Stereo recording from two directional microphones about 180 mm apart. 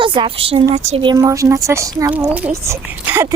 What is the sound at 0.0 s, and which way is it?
Speech, 30° right (ahead or behind).